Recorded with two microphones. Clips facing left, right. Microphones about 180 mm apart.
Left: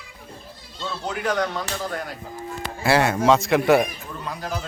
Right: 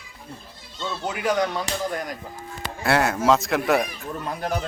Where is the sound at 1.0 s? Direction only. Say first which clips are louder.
Right 1 dB; 10° right (ahead or behind).